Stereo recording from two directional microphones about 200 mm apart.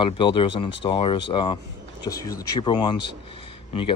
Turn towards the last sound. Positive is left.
turn(degrees=25)  # may be behind; listen again after turning